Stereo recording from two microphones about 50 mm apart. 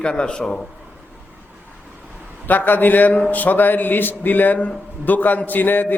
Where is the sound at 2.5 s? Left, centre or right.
Left.